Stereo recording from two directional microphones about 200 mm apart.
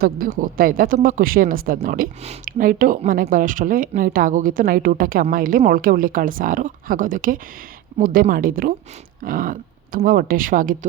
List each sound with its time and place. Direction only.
0.0 s speech: 45° right (ahead or behind)